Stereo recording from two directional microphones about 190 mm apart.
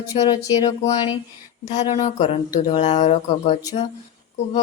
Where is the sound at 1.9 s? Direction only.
35° left (ahead or behind).